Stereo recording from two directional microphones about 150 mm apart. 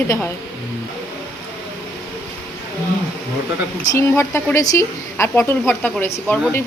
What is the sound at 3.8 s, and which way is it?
A woman's voice, 20° left (ahead or behind).